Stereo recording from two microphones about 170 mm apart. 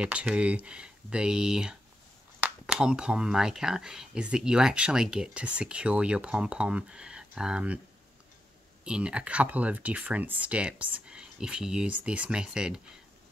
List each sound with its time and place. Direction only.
0.0 s speech: 5° right (ahead or behind)
8.8 s speech: 5° right (ahead or behind)